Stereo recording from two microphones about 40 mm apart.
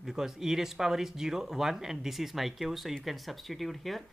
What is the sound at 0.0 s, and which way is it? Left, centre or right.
Speech, centre.